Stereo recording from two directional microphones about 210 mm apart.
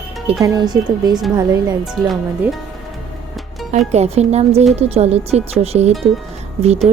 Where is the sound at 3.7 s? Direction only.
30° right (ahead or behind).